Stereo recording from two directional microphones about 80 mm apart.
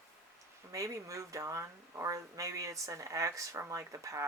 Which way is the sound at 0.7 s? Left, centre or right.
Right.